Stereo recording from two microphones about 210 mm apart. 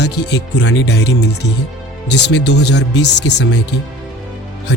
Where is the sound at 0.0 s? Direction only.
55° left (ahead or behind).